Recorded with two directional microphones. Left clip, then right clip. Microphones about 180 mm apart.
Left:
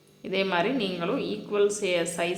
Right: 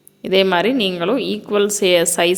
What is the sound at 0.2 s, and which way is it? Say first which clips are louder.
Speech: right 11 dB; 55° right (ahead or behind).